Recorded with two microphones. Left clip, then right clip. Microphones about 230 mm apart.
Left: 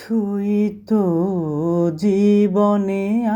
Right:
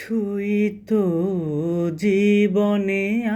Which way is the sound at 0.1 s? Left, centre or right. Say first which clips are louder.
Left 2 dB; left.